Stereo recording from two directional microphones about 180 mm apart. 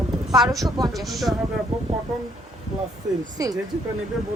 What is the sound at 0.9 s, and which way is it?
Speech, centre (ahead or behind).